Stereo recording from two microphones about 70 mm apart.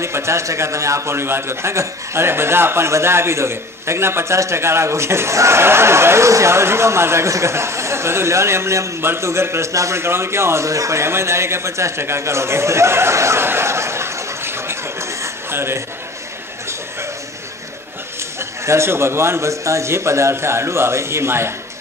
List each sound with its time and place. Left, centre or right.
0.0 s a man's voice: right
18.7 s a man's voice: right